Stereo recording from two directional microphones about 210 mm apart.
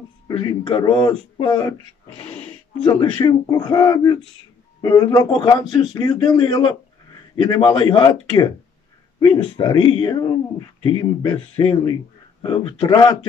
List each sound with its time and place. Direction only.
0.4 s speech: 25° left (ahead or behind)